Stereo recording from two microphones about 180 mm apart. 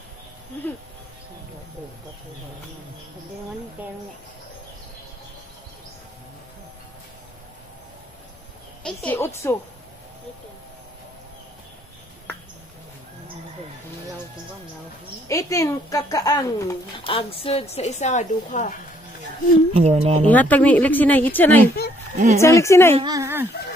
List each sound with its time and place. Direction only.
3.8 s speech: 10° right (ahead or behind)
8.8 s speech: 10° left (ahead or behind)
15.2 s a woman's voice: 20° left (ahead or behind)
17.0 s a woman's voice: 30° left (ahead or behind)
19.7 s speech: 35° right (ahead or behind)
20.2 s speech: 10° left (ahead or behind)
22.1 s speech: 45° right (ahead or behind)
22.4 s speech: 15° left (ahead or behind)
22.9 s speech: 20° right (ahead or behind)